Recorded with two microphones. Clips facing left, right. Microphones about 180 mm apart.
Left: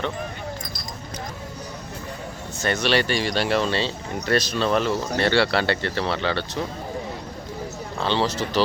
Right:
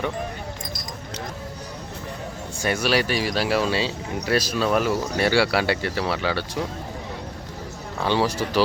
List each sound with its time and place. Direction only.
2.6 s speech: 10° right (ahead or behind)
7.9 s speech: 10° right (ahead or behind)